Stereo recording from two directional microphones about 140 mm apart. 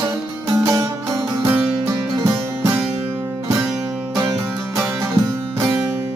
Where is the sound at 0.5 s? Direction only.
25° right (ahead or behind).